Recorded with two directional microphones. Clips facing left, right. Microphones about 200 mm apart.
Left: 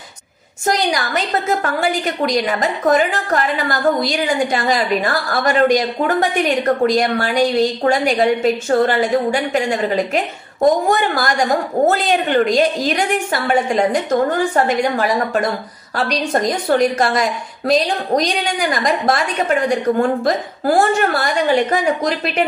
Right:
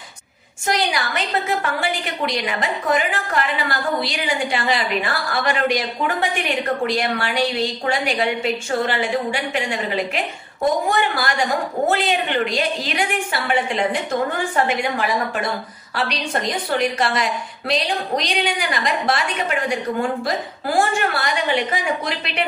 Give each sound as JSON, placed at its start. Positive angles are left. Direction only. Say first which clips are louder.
{"t": 0.7, "sound": "a woman's voice", "louder": "left 4 dB", "side_deg": 40}
{"t": 16.1, "sound": "a woman's voice", "louder": "left 9 dB", "side_deg": 45}